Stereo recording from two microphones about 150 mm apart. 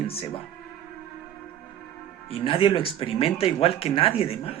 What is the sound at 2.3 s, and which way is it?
Speech, 40° left (ahead or behind).